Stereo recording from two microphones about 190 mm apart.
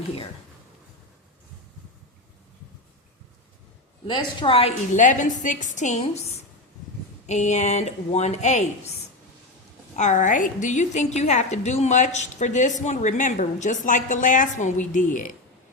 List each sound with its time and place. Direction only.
4.0 s a woman's voice: 25° left (ahead or behind)
4.9 s a woman's voice: 40° left (ahead or behind)
9.9 s a woman's voice: 40° left (ahead or behind)